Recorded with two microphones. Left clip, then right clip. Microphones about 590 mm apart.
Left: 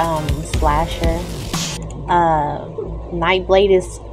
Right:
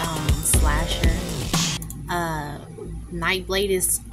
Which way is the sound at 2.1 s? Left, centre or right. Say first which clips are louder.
Left 12 dB; right.